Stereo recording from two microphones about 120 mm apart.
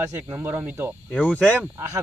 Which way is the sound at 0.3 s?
15° right (ahead or behind).